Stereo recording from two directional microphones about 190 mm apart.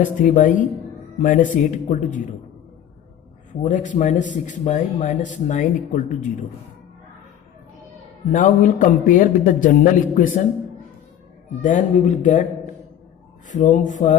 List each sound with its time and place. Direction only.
0.0 s a man's voice: 45° left (ahead or behind)
3.6 s speech: 40° left (ahead or behind)
8.3 s a man's voice: 40° left (ahead or behind)
11.6 s speech: 40° left (ahead or behind)
13.5 s speech: 40° left (ahead or behind)